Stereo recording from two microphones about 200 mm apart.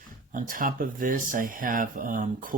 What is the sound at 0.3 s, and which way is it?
Speech, 45° right (ahead or behind).